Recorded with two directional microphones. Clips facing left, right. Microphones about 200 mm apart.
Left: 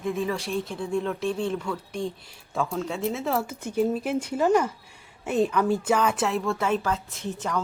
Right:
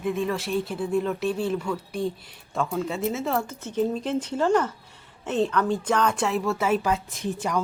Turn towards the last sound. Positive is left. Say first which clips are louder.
# right 2 dB
turn(degrees=-15)  # may be behind; listen again after turning